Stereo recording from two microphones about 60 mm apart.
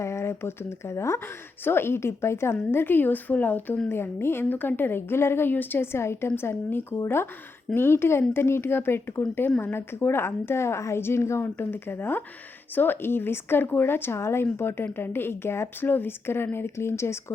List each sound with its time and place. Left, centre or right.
0.0 s a woman's voice: left
1.2 s a woman's voice: left
11.5 s a woman's voice: left